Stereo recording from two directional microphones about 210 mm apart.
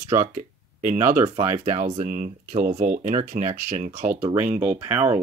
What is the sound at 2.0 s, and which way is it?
Speech, 40° right (ahead or behind).